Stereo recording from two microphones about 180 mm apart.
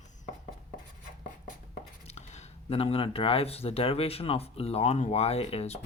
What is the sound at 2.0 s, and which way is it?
Speech, 40° left (ahead or behind).